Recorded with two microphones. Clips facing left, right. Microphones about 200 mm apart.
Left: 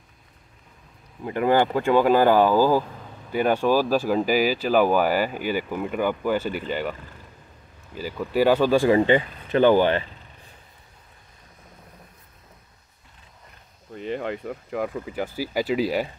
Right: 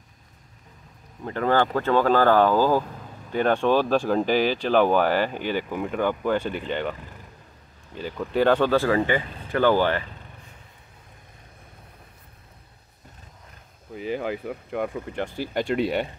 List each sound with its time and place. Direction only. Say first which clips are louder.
1.2 s speech: left 2 dB; 10° left (ahead or behind)
13.9 s speech: right 1 dB; 5° right (ahead or behind)